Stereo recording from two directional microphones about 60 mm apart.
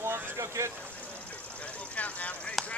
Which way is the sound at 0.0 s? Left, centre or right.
Right.